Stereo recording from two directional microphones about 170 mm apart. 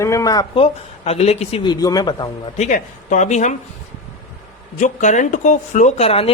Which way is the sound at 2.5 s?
45° left (ahead or behind).